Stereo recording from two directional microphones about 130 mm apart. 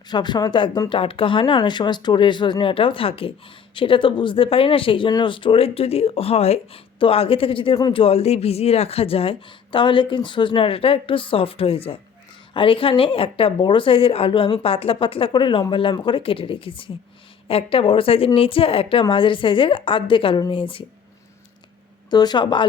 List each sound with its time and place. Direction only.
0.1 s speech: 35° left (ahead or behind)
7.8 s a woman's voice: 35° left (ahead or behind)
8.0 s a woman's voice: 50° left (ahead or behind)
22.1 s a woman's voice: 30° left (ahead or behind)